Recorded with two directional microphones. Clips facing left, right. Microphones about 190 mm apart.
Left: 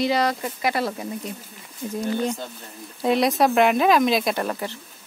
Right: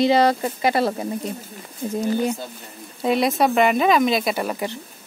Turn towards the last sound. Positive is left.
turn(degrees=-5)  # may be behind; listen again after turning